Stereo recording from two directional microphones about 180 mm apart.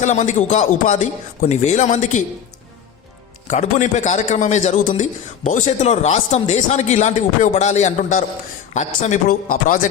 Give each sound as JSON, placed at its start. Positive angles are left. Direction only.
{"t": 0.0, "sound": "a man's voice", "side_deg": 40}
{"t": 3.4, "sound": "a man's voice", "side_deg": 40}